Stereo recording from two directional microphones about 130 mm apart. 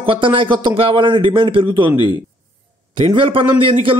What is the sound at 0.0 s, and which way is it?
A man's voice, 40° right (ahead or behind).